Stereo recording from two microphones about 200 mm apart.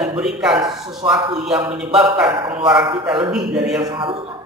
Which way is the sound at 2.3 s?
25° right (ahead or behind).